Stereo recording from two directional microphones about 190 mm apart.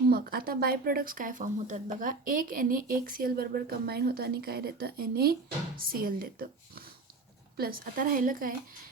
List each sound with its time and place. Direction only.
0.1 s speech: 50° right (ahead or behind)